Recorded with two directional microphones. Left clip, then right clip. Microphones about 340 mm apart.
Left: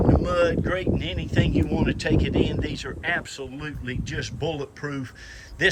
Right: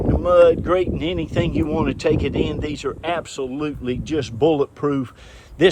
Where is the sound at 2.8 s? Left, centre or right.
Right.